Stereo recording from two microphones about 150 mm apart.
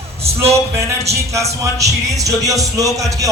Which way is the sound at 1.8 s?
20° right (ahead or behind).